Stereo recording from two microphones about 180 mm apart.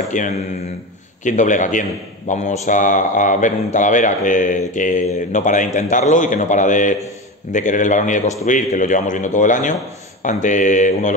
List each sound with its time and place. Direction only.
0.1 s a man's voice: 45° left (ahead or behind)